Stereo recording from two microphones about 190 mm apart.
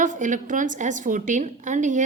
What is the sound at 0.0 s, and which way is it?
A woman's voice, 40° right (ahead or behind).